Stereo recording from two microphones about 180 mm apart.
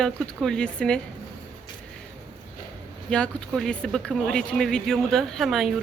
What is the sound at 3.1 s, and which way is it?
Speech, 5° left (ahead or behind).